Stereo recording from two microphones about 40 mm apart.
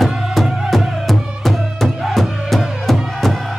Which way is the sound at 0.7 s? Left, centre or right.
Centre.